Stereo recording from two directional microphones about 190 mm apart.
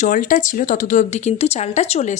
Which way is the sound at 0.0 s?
45° left (ahead or behind).